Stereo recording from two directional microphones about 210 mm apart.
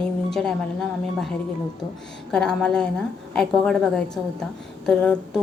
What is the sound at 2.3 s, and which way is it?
Speech, 5° left (ahead or behind).